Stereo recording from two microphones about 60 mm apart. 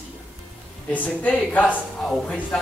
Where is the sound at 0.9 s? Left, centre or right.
Left.